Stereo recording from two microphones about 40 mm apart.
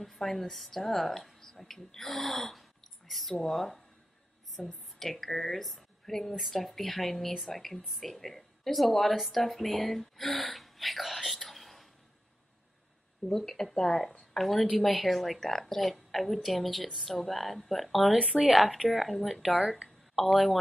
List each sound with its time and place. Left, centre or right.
0.0 s a woman's voice: centre
13.2 s speech: left
13.6 s a woman's voice: centre